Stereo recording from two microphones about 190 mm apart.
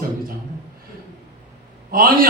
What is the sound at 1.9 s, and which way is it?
Speech, 50° right (ahead or behind).